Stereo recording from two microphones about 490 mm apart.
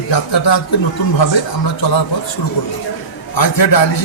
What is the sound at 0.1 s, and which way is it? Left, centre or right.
Speech, left.